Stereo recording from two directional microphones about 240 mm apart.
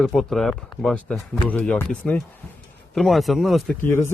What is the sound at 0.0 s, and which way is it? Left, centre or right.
Speech, centre.